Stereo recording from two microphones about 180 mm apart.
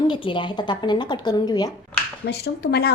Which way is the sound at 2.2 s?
65° left (ahead or behind).